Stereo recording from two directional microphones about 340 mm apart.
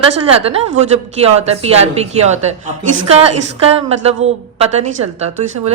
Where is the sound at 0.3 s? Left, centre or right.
Centre.